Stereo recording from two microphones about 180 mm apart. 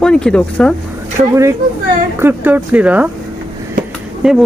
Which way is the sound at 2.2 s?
10° right (ahead or behind).